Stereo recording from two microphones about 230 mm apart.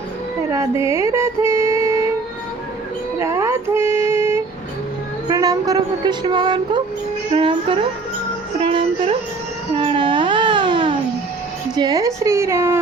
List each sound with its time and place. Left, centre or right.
0.5 s music: centre
3.2 s a sound: centre
5.3 s speech: centre
7.3 s music: right
9.7 s baby cry: right
11.7 s a woman's voice: centre